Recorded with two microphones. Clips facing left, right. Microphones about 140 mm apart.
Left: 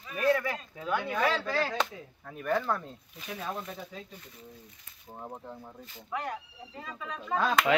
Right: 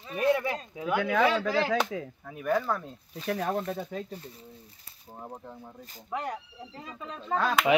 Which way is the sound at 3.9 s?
50° right (ahead or behind).